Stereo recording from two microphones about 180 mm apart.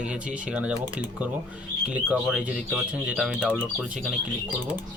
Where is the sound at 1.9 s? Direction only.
5° right (ahead or behind).